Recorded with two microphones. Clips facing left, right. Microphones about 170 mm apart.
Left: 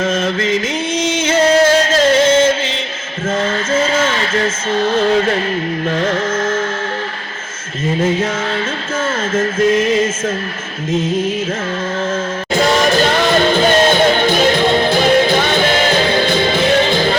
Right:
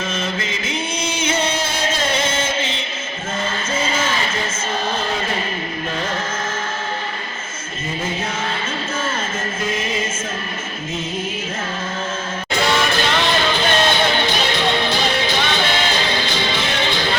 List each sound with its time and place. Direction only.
0.0 s chant: 90° left
12.5 s music: 45° left (ahead or behind)